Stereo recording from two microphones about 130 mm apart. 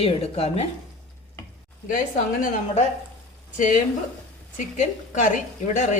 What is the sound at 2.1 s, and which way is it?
Speech, 90° left.